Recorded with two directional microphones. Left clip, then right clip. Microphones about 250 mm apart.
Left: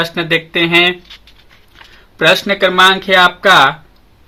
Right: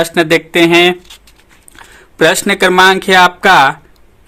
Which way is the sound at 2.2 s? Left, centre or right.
Right.